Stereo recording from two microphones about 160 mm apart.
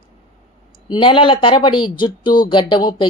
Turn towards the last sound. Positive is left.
turn(degrees=30)  # may be behind; listen again after turning